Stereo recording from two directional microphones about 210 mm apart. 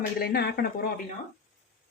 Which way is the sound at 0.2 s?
50° left (ahead or behind).